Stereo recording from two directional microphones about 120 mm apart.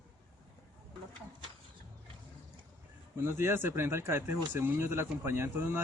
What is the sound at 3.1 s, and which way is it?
A man's voice, 20° right (ahead or behind).